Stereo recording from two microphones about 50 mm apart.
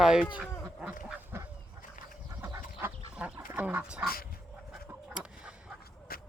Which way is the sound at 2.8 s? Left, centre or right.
Right.